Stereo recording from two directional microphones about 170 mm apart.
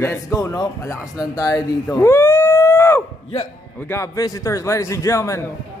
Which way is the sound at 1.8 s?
10° left (ahead or behind).